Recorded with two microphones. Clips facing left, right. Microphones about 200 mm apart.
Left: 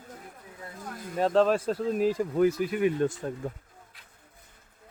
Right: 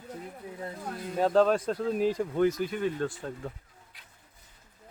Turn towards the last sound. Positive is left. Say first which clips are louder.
# left 5 dB
turn(degrees=15)  # may be behind; listen again after turning